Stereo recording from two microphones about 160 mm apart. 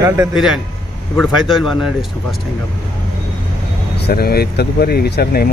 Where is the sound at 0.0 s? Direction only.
20° right (ahead or behind).